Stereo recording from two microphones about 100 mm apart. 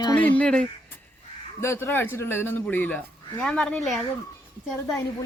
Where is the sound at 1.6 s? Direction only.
25° left (ahead or behind); by 4.0 s 5° left (ahead or behind).